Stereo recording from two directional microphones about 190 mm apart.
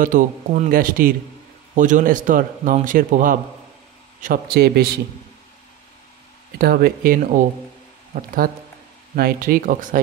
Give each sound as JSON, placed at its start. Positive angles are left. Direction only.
{"t": 0.0, "sound": "a man's voice", "side_deg": -40}
{"t": 6.6, "sound": "a man's voice", "side_deg": -50}